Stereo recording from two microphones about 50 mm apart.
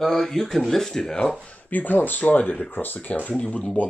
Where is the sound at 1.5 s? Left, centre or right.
Left.